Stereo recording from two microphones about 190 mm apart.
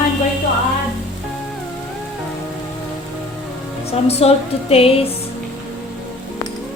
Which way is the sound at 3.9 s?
35° left (ahead or behind).